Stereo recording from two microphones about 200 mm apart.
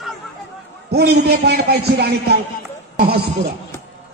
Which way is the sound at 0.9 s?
55° right (ahead or behind).